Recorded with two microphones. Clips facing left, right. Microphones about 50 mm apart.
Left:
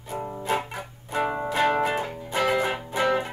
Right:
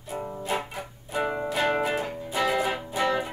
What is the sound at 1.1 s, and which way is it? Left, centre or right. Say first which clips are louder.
Music: left 2 dB; centre.